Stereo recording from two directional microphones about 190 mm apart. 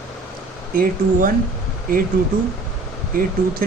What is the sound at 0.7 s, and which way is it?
Speech, 50° right (ahead or behind).